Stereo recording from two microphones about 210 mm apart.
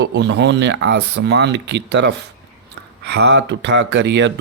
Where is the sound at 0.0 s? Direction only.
60° right (ahead or behind).